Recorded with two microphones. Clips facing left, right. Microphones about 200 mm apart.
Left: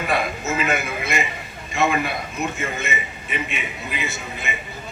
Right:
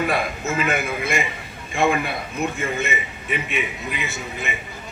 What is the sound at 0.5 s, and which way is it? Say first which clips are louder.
Speech: right 1 dB; 55° right (ahead or behind).